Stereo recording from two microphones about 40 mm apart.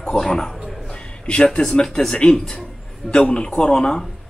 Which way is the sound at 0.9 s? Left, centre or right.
Left.